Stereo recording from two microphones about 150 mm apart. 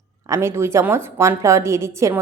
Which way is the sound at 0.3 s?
15° right (ahead or behind).